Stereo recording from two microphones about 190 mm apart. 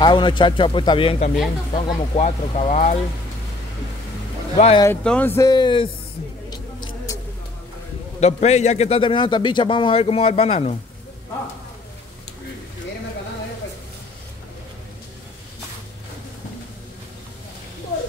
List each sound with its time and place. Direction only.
0.0 s a man's voice: 25° left (ahead or behind)
4.6 s a man's voice: 35° left (ahead or behind)
5.0 s speech: 10° left (ahead or behind); by 5.9 s 25° left (ahead or behind)
8.2 s a man's voice: 35° left (ahead or behind)